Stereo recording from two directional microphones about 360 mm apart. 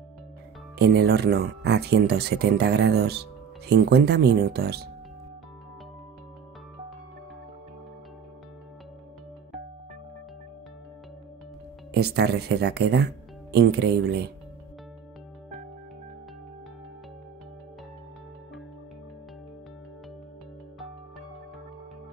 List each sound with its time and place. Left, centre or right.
0.7 s speech: right
11.9 s speech: right